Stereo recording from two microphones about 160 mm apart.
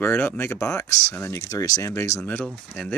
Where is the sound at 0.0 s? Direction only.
15° left (ahead or behind).